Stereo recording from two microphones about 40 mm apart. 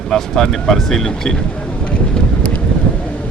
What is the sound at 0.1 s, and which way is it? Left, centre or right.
Speech, centre.